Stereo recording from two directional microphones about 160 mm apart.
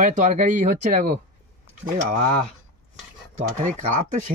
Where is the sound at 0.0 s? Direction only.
50° right (ahead or behind).